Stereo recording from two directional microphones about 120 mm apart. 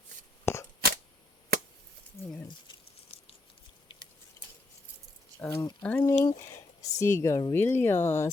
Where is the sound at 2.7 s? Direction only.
45° left (ahead or behind).